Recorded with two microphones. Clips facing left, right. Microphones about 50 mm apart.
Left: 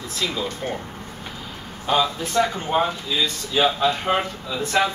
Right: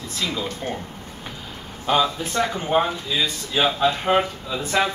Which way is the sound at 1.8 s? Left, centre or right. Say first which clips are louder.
Right 1 dB; centre.